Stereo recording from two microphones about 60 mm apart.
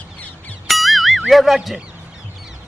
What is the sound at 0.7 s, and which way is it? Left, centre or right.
Music, centre.